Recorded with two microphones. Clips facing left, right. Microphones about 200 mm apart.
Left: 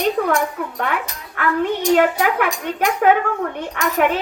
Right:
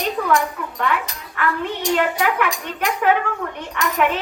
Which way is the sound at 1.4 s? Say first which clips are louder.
Left 4 dB; 50° left (ahead or behind).